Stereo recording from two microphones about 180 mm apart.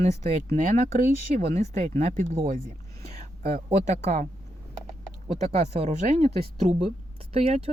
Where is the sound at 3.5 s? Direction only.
40° right (ahead or behind).